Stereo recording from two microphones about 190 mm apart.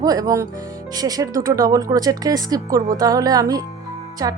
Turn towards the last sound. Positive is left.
turn(degrees=-20)  # may be behind; listen again after turning